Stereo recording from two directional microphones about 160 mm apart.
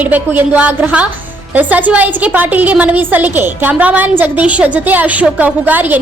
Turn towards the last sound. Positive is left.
turn(degrees=-10)  # may be behind; listen again after turning